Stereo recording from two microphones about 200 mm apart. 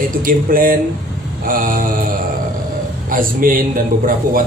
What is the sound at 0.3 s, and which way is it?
A woman's voice, 45° right (ahead or behind).